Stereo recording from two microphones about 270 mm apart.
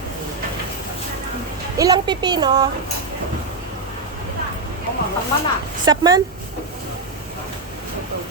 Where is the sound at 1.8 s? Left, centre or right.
Centre.